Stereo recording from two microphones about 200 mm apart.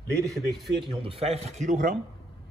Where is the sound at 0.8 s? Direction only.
30° right (ahead or behind).